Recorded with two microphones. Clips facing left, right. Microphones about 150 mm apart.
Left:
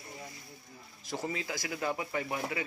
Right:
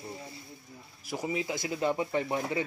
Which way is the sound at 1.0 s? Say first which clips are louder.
Right 4 dB; 10° right (ahead or behind).